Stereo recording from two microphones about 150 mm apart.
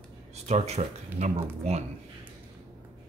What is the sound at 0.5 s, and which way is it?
Speech, 45° right (ahead or behind).